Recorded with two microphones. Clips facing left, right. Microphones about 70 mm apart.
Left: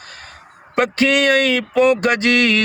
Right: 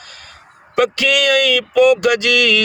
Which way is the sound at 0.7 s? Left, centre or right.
Left.